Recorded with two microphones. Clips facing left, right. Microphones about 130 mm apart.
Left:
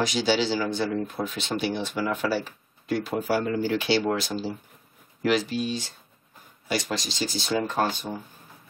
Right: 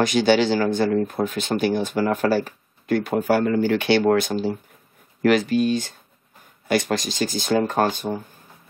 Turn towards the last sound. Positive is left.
turn(degrees=-50)  # may be behind; listen again after turning